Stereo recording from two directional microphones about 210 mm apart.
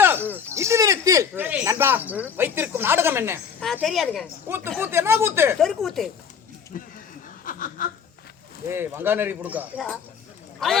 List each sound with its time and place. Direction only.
0.0 s speech: 10° right (ahead or behind)
3.6 s a woman's voice: centre (ahead or behind)
4.4 s a man's voice: 10° right (ahead or behind)
5.5 s a woman's voice: centre (ahead or behind)
6.7 s speech: 40° left (ahead or behind)
7.4 s snicker: 40° left (ahead or behind)
8.7 s a man's voice: 10° right (ahead or behind)